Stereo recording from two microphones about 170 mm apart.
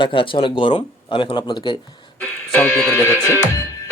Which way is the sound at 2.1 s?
10° left (ahead or behind).